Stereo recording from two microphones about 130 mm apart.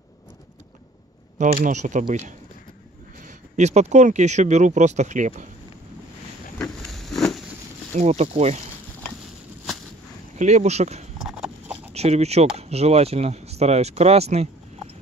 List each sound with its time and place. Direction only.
1.4 s speech: 80° right
6.6 s a sound: 5° left (ahead or behind)
7.9 s speech: 60° right (ahead or behind)
10.3 s speech: 60° right (ahead or behind)
11.2 s horse: 10° right (ahead or behind)
11.9 s speech: 55° right (ahead or behind)